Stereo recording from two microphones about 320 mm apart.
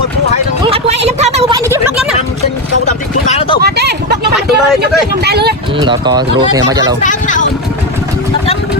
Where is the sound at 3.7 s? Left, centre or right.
Right.